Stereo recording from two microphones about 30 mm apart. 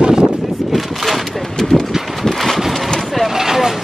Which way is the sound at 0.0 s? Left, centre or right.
Right.